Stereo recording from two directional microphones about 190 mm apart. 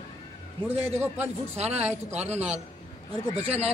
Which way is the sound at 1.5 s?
35° right (ahead or behind).